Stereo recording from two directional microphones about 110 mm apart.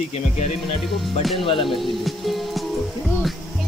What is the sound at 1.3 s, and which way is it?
Speech, 50° left (ahead or behind).